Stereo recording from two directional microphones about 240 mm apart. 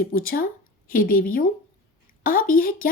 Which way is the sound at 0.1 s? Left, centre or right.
Left.